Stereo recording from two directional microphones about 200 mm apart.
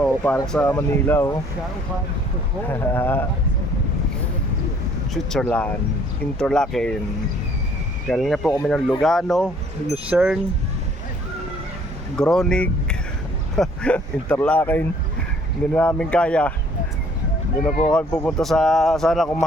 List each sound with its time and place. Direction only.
0.0 s speech: 10° left (ahead or behind)
2.6 s speech: 10° left (ahead or behind)
5.1 s speech: 5° left (ahead or behind)
8.0 s speech: centre (ahead or behind)
12.1 s speech: 5° left (ahead or behind)
17.9 s speech: 5° left (ahead or behind)